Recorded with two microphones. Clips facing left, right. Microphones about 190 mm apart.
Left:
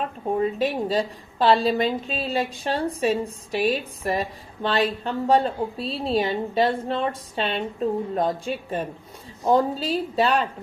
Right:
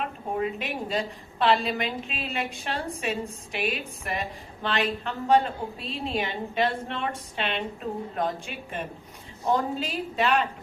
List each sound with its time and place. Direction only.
0.3 s a woman's voice: 35° left (ahead or behind)